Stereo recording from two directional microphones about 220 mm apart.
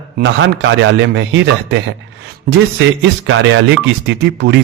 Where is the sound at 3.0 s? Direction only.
55° right (ahead or behind).